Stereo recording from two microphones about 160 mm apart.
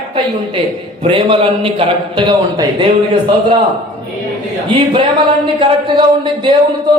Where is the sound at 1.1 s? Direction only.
35° right (ahead or behind).